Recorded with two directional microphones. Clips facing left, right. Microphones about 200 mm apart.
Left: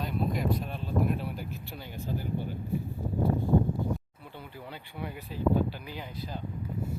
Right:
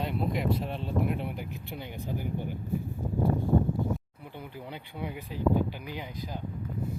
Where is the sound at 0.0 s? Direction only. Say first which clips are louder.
Right 1 dB; 25° right (ahead or behind).